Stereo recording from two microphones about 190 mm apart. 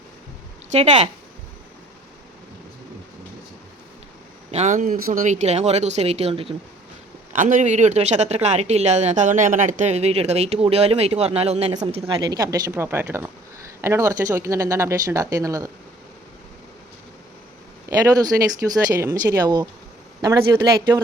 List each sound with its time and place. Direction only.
0.7 s speech: 35° right (ahead or behind)
4.5 s speech: 40° right (ahead or behind)
7.3 s speech: 40° right (ahead or behind); by 15.7 s 15° right (ahead or behind)
17.8 s speech: 20° right (ahead or behind)